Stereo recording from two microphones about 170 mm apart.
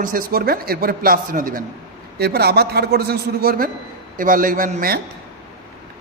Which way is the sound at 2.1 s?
70° right (ahead or behind).